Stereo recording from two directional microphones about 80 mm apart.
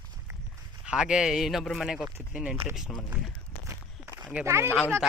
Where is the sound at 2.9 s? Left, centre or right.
Centre.